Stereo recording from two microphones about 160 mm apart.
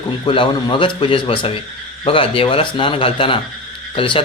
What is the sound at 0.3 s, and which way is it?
A man's voice, 30° left (ahead or behind).